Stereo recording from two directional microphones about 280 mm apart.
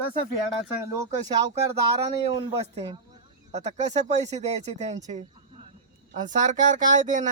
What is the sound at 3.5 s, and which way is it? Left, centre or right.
Speech, right.